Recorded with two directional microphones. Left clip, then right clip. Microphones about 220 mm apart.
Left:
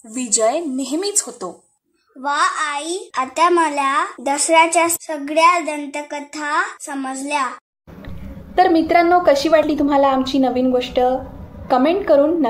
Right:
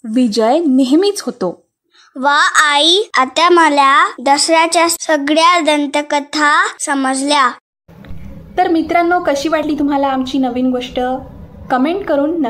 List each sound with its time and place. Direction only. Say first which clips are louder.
0.1 s a woman's voice: right 5 dB; 30° right (ahead or behind)
4.2 s a woman's voice: right 3 dB; 15° right (ahead or behind)
5.0 s a woman's voice: right 4 dB; 30° right (ahead or behind)
8.5 s a woman's voice: even; 10° right (ahead or behind)